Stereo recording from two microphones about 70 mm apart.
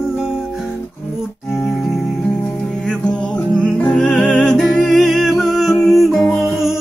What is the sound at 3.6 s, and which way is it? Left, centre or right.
Music, centre.